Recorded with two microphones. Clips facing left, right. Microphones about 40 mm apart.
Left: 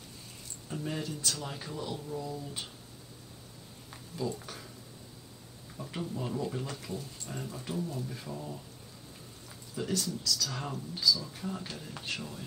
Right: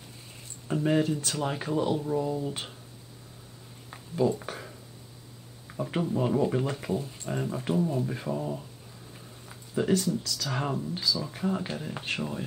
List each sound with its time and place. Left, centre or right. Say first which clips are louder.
0.7 s speech: right 11 dB; right
1.1 s speech: right 4 dB; right
1.4 s speech: right 11 dB; right
3.9 s a sound: right 10 dB; right
5.7 s speech: right 9 dB; right
9.8 s speech: right 8 dB; right